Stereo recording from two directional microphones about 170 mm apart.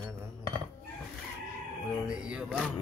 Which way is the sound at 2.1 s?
5° right (ahead or behind).